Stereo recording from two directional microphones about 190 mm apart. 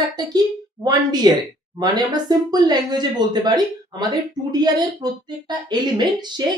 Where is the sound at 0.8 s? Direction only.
20° right (ahead or behind).